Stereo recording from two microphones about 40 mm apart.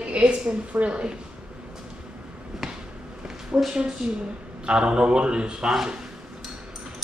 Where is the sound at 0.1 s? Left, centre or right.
Right.